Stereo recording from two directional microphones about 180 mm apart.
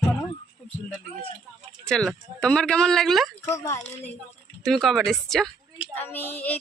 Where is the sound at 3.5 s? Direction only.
15° left (ahead or behind).